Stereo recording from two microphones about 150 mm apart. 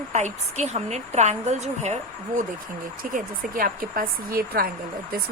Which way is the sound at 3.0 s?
65° right (ahead or behind).